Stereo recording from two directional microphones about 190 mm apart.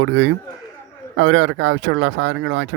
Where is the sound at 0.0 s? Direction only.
70° right (ahead or behind).